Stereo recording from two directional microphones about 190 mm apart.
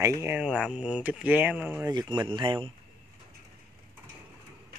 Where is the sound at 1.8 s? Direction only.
20° right (ahead or behind).